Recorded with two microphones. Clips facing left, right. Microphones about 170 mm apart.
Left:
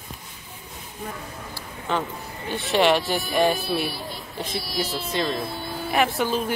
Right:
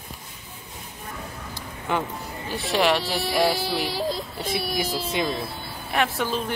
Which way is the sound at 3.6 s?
90° right.